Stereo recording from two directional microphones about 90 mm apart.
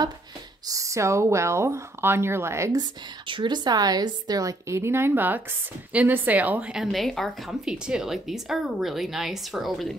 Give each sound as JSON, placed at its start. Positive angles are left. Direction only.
{"t": 0.7, "sound": "speech", "side_deg": -35}
{"t": 3.3, "sound": "a woman's voice", "side_deg": -60}
{"t": 6.7, "sound": "speech", "side_deg": 0}